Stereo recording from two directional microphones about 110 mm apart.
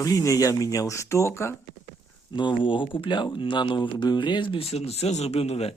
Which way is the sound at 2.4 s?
45° left (ahead or behind).